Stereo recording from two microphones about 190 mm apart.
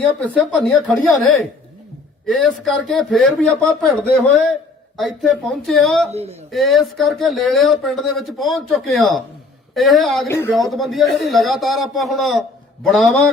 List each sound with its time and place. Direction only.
0.0 s speech: 5° left (ahead or behind)
6.1 s speech: 35° right (ahead or behind)
6.5 s speech: centre (ahead or behind)
10.2 s a man's voice: 15° left (ahead or behind)
10.7 s speech: centre (ahead or behind)